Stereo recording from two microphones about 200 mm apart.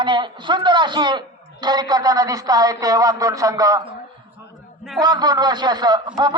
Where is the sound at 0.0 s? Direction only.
25° right (ahead or behind).